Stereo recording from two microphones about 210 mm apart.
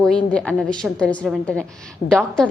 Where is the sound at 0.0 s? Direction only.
5° left (ahead or behind).